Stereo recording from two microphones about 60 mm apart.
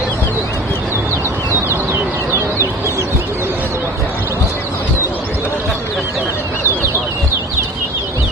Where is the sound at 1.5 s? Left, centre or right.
Right.